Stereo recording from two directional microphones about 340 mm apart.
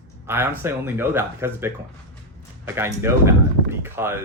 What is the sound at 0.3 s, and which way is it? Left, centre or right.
Speech, centre.